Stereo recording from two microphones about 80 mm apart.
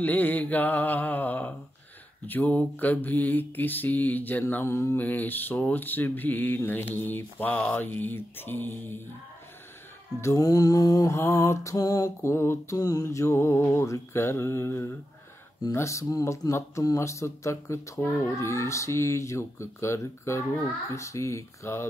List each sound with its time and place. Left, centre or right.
0.0 s speech: left
10.2 s mantra: left
11.1 s speech: left
12.2 s speech: left
12.7 s speech: left